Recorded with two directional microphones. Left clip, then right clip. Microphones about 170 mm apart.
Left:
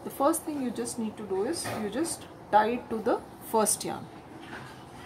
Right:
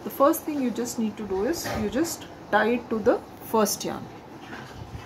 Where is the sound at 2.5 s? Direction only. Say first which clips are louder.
Right 1 dB; 20° right (ahead or behind).